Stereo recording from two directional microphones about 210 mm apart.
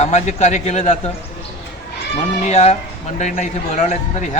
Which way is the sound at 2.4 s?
30° left (ahead or behind).